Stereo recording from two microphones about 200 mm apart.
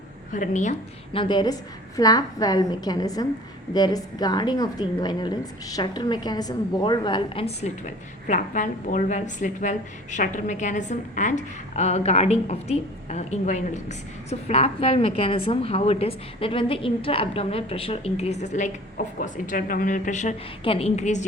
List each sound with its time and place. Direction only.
0.3 s a woman's voice: 40° left (ahead or behind)
1.2 s a woman's voice: 20° left (ahead or behind)